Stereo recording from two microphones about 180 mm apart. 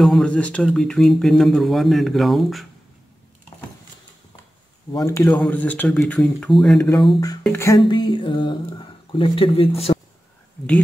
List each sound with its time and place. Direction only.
0.0 s speech: 5° left (ahead or behind)
4.9 s a man's voice: 20° left (ahead or behind)
5.3 s speech: 5° left (ahead or behind)
7.1 s speech: 20° left (ahead or behind)
9.9 s a sound: 30° left (ahead or behind)